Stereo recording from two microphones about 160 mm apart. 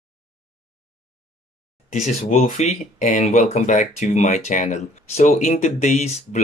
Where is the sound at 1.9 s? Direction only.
45° left (ahead or behind).